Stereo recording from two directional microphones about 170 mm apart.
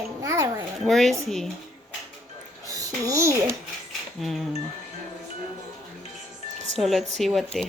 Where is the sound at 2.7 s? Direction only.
20° right (ahead or behind).